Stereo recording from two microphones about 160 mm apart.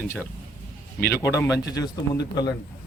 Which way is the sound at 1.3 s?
20° left (ahead or behind).